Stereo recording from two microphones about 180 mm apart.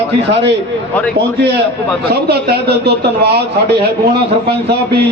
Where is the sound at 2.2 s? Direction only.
65° right (ahead or behind).